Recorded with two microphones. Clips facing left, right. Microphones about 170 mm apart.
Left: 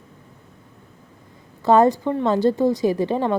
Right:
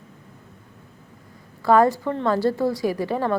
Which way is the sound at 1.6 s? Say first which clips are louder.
Left 2 dB; 20° left (ahead or behind).